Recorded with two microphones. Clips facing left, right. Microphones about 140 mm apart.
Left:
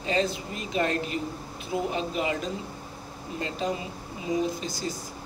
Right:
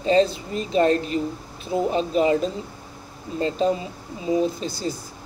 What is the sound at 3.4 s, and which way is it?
Speech, 35° right (ahead or behind).